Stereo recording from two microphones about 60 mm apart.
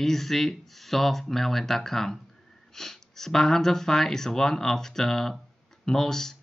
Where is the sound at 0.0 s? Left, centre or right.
Centre.